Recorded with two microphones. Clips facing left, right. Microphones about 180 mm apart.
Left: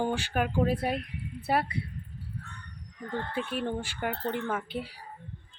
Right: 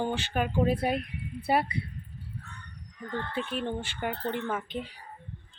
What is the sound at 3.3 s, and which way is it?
Speech, 10° left (ahead or behind).